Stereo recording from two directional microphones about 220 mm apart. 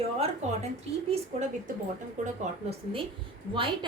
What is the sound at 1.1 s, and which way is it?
A woman's voice, 30° right (ahead or behind).